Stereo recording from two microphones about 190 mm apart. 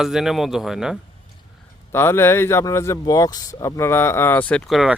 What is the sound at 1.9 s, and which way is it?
Speech, 15° left (ahead or behind).